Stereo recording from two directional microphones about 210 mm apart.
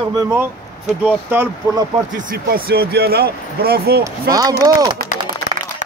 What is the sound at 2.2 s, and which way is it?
Speech, 40° right (ahead or behind).